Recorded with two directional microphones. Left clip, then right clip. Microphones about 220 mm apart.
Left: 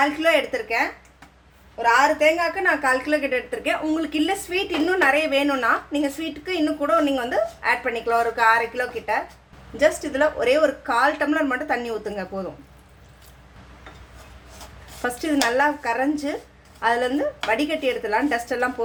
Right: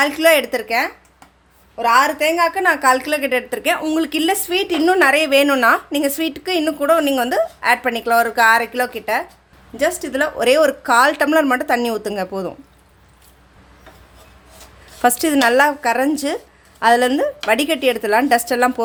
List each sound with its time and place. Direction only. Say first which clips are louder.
0.0 s a woman's voice: right 5 dB; 50° right (ahead or behind)
15.0 s a woman's voice: right 8 dB; 50° right (ahead or behind)